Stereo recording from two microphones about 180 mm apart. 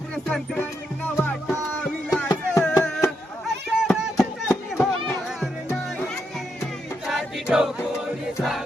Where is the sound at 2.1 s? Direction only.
15° left (ahead or behind); by 4.2 s centre (ahead or behind).